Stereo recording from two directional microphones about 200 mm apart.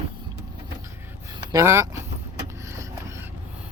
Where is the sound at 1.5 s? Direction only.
15° right (ahead or behind).